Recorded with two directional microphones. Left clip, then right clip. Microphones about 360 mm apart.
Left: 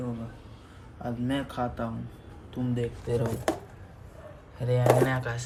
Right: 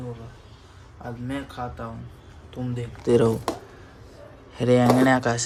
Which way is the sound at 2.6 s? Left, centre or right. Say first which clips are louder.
Even; right.